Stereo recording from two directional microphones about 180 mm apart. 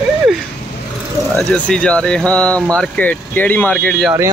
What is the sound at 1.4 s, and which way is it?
Speech, 5° left (ahead or behind).